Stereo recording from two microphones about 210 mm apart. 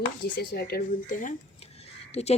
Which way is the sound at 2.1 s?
30° left (ahead or behind).